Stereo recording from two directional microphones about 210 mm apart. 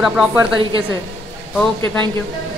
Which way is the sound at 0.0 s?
5° right (ahead or behind).